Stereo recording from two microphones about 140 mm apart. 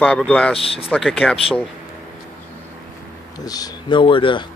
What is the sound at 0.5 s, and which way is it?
Speech, 45° left (ahead or behind).